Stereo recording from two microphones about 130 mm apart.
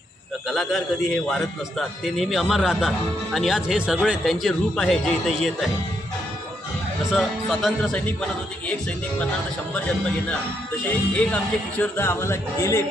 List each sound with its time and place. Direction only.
0.4 s a man's voice: centre (ahead or behind)
7.1 s a man's voice: centre (ahead or behind)
10.8 s music: 10° left (ahead or behind)
11.8 s a man's voice: 20° left (ahead or behind)